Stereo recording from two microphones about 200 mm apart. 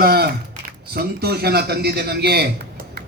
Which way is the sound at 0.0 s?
50° right (ahead or behind).